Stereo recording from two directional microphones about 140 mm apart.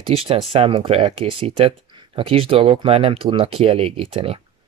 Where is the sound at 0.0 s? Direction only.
40° right (ahead or behind).